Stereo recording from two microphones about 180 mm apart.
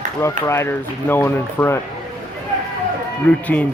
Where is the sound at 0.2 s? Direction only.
15° left (ahead or behind).